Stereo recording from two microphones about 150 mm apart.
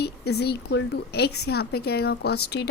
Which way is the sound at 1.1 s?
90° left.